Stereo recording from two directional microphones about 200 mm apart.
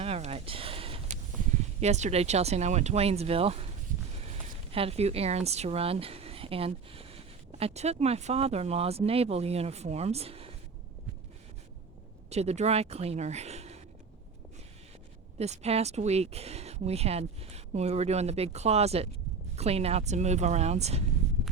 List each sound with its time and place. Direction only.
0.0 s a sound: 30° right (ahead or behind)
1.8 s speech: 35° right (ahead or behind)
12.3 s speech: 30° right (ahead or behind)
15.4 s speech: 30° right (ahead or behind)